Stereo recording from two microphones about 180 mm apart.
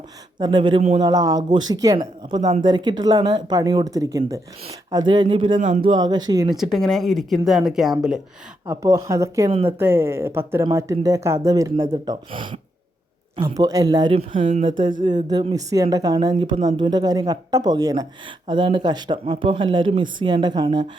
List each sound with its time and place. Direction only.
0.3 s speech: 25° right (ahead or behind)
5.5 s speech: 45° right (ahead or behind)
5.9 s speech: 25° right (ahead or behind)
6.5 s speech: centre (ahead or behind)
8.7 s speech: 15° right (ahead or behind)